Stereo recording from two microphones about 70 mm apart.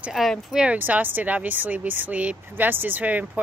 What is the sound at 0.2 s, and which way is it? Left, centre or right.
Speech, centre.